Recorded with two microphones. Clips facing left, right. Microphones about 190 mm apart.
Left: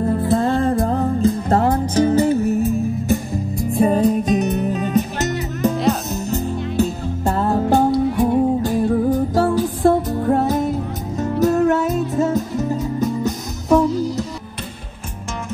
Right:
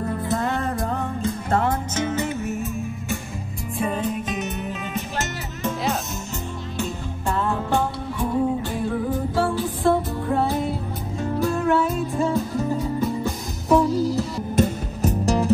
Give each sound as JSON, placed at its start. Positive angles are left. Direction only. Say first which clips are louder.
{"t": 0.0, "sound": "music", "louder": "left 7 dB", "side_deg": 30}
{"t": 14.6, "sound": "music", "louder": "right 12 dB", "side_deg": -40}